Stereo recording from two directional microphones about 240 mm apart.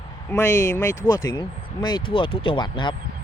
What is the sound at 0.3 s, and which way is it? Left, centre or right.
Speech, centre.